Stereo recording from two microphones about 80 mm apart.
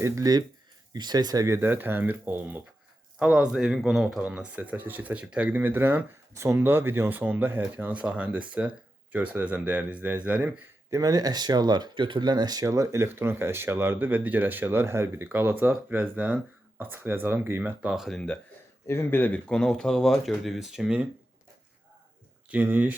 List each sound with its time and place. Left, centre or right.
0.0 s speech: right
0.9 s speech: right
1.5 s speech: right
3.2 s a man's voice: centre
4.2 s speech: centre
6.3 s a man's voice: right; by 10.6 s centre
10.9 s speech: right
12.6 s speech: right
13.1 s speech: right
17.9 s speech: centre
18.9 s speech: left
19.5 s speech: centre
22.4 s speech: centre